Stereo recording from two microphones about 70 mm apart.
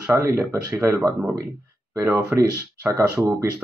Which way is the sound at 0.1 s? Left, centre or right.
Right.